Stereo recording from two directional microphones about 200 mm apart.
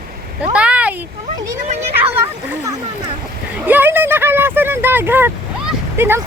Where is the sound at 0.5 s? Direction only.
5° right (ahead or behind).